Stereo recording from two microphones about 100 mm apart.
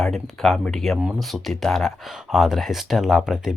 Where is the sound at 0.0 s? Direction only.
Centre (ahead or behind).